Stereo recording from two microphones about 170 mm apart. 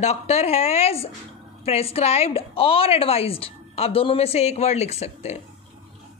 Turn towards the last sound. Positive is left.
turn(degrees=40)  # may be behind; listen again after turning